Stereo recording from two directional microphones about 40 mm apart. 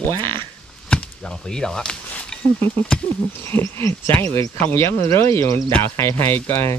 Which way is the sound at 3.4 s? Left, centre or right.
Left.